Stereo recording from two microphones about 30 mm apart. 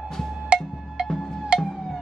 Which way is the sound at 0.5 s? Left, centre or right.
Right.